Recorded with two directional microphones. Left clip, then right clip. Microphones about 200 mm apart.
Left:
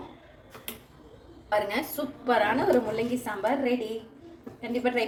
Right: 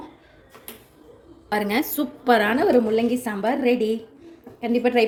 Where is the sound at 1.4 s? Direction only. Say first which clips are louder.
Right 4 dB; 45° right (ahead or behind).